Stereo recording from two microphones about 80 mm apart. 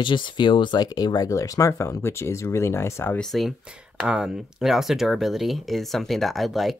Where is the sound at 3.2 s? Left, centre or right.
Centre.